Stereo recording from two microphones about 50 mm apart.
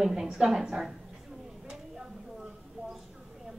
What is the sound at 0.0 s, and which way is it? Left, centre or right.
Speech, centre.